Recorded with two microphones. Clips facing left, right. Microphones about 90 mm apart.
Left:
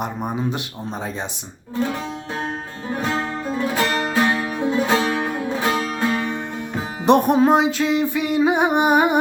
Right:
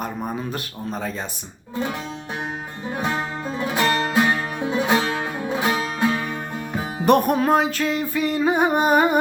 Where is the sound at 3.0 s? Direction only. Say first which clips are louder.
Left 1 dB; 15° right (ahead or behind).